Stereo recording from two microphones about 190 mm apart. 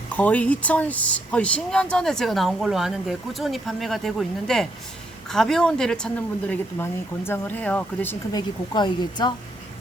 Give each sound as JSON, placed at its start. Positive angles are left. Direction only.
{"t": 0.1, "sound": "speech", "side_deg": 10}
{"t": 8.3, "sound": "speech", "side_deg": 20}